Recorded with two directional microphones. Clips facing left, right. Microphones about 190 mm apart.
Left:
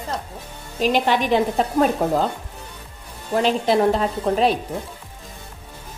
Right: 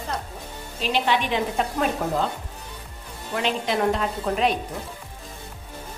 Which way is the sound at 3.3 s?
35° left (ahead or behind).